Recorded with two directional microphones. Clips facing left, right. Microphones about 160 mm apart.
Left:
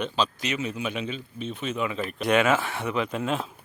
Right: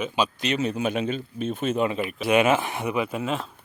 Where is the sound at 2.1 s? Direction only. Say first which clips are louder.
Left 1 dB; 5° right (ahead or behind).